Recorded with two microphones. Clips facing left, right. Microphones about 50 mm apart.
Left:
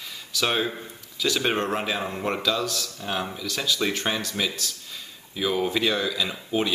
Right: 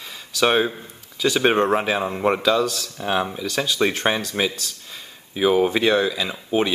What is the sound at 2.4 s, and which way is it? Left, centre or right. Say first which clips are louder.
Speech: right 6 dB; right.